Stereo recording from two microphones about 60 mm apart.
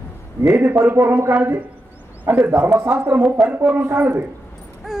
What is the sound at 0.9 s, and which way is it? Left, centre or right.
Speech, right.